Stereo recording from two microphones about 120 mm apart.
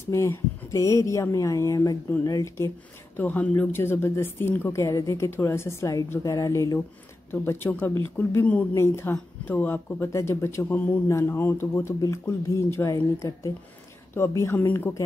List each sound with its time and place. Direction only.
0.0 s speech: 25° left (ahead or behind)
3.2 s speech: 15° left (ahead or behind)
14.1 s speech: 20° left (ahead or behind)